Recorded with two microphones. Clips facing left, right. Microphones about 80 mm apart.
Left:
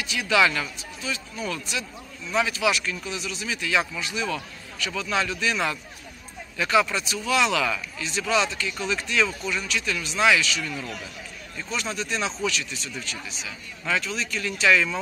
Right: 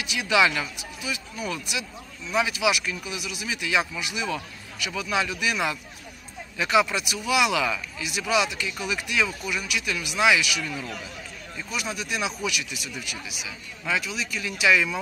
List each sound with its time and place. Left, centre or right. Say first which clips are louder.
0.0 s speech: even; centre